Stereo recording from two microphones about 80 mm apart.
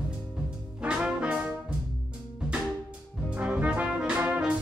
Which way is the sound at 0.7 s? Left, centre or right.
Centre.